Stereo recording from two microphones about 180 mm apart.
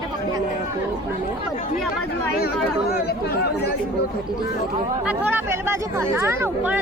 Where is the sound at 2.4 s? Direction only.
60° left (ahead or behind).